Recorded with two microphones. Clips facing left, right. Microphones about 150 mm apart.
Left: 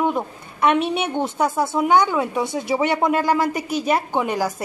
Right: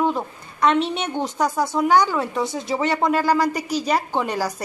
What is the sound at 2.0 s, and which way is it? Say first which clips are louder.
A woman's voice: left 1 dB; 20° left (ahead or behind).